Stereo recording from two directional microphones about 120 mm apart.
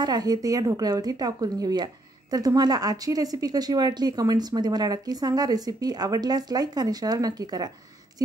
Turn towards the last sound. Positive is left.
turn(degrees=-35)  # may be behind; listen again after turning